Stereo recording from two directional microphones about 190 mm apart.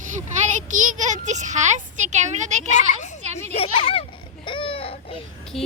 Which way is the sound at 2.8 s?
40° left (ahead or behind).